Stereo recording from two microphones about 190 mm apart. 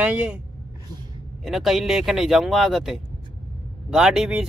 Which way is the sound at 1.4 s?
Centre (ahead or behind).